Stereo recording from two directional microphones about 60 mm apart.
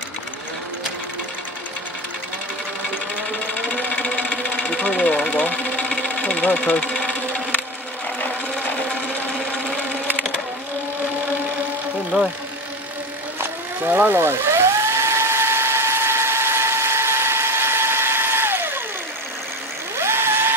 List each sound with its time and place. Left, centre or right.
3.6 s sewing machine: left
12.1 s speech: centre
13.4 s vehicle: right
20.0 s vehicle: right